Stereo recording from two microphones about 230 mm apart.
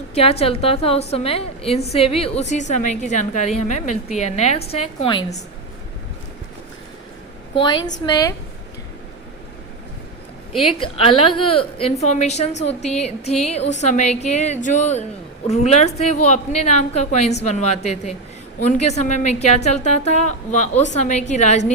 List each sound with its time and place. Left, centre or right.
0.1 s a woman's voice: left
7.5 s a woman's voice: centre
10.6 s a woman's voice: left